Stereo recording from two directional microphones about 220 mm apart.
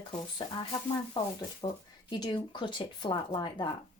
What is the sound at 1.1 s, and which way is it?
A woman's voice, 20° left (ahead or behind).